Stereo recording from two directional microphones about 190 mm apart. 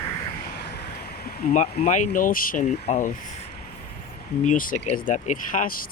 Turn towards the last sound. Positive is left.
turn(degrees=45)  # may be behind; listen again after turning